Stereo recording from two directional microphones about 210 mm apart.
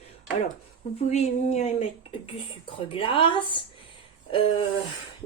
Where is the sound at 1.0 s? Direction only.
30° left (ahead or behind).